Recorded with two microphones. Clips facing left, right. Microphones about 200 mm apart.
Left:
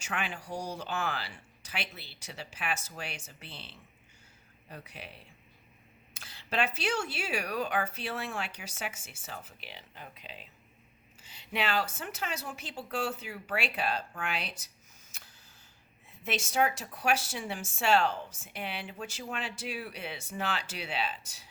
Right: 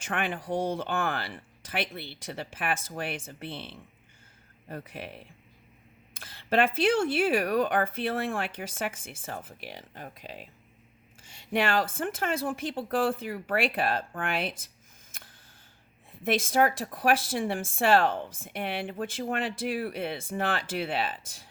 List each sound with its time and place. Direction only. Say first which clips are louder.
0.0 s speech: right 5 dB; 55° right (ahead or behind)
6.1 s a sound: right 7 dB; 55° right (ahead or behind)
6.7 s speech: right 9 dB; 55° right (ahead or behind)
16.1 s speech: right 5 dB; 55° right (ahead or behind)